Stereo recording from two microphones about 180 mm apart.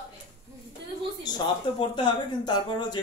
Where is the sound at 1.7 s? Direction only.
25° left (ahead or behind).